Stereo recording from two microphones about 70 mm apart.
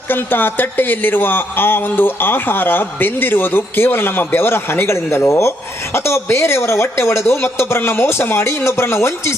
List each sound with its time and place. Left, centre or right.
0.1 s speech: left